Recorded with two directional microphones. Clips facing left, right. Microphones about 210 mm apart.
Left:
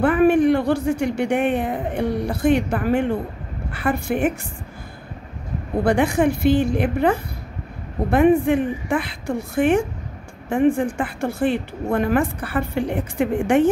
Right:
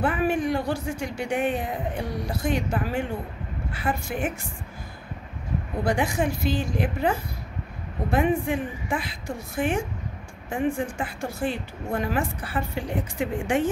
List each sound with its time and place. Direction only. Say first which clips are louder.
0.0 s a woman's voice: left 9 dB; 55° left (ahead or behind)
5.9 s a woman's voice: left 7 dB; 60° left (ahead or behind)
10.5 s a woman's voice: left 8 dB; 60° left (ahead or behind)